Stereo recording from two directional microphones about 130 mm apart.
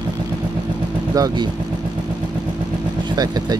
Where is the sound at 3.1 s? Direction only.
30° right (ahead or behind).